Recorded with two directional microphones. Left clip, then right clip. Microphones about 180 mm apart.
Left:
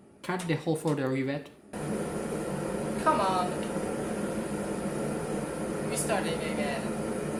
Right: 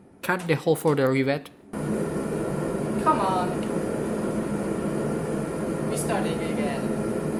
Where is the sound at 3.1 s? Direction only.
15° left (ahead or behind).